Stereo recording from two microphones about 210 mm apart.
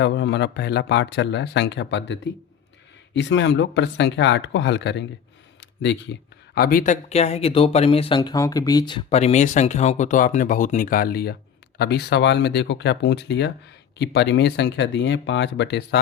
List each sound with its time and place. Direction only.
0.0 s speech: 55° left (ahead or behind)
5.5 s a sound: 55° left (ahead or behind)
6.5 s speech: 45° left (ahead or behind)